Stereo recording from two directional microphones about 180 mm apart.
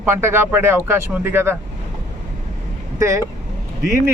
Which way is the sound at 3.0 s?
20° right (ahead or behind).